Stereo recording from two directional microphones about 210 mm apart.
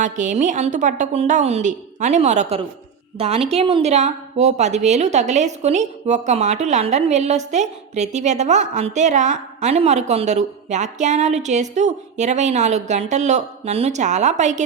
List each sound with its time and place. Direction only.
0.0 s a woman's voice: 35° right (ahead or behind)